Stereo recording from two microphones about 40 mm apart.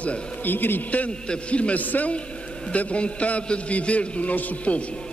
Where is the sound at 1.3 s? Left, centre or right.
Left.